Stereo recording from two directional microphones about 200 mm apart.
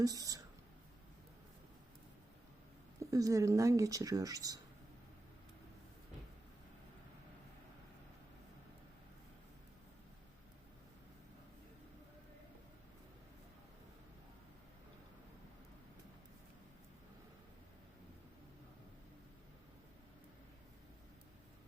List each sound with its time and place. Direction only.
0.0 s speech: 20° right (ahead or behind)
3.0 s speech: 15° right (ahead or behind)